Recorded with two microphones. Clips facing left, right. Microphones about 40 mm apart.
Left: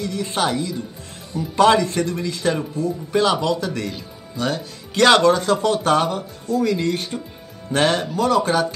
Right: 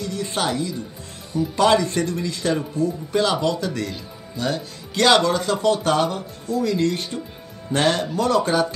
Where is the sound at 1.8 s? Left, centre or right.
Centre.